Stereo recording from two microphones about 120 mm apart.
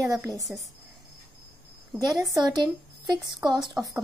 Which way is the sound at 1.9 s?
30° right (ahead or behind).